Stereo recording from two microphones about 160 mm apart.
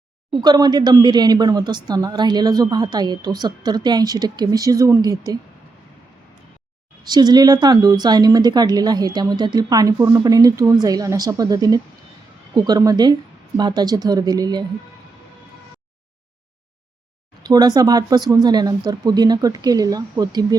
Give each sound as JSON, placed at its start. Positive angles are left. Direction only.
{"t": 0.4, "sound": "a woman's voice", "side_deg": -25}
{"t": 7.0, "sound": "a woman's voice", "side_deg": -25}
{"t": 17.4, "sound": "a woman's voice", "side_deg": -25}